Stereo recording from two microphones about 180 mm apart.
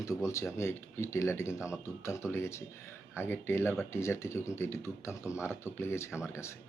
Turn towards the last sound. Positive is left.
turn(degrees=15)  # may be behind; listen again after turning